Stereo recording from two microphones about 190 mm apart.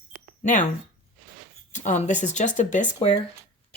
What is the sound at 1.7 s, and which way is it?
Speech, 40° left (ahead or behind).